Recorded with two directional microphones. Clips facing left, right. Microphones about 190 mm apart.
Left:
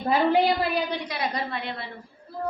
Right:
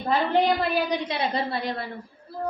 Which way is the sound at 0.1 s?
5° left (ahead or behind).